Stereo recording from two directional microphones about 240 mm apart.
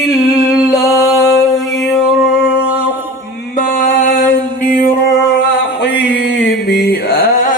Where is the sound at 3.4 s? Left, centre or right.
Left.